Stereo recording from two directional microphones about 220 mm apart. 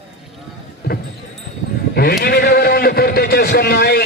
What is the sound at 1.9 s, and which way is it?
Horse, 45° left (ahead or behind).